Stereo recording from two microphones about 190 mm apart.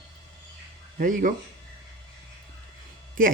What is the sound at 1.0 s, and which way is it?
Speech, 45° right (ahead or behind).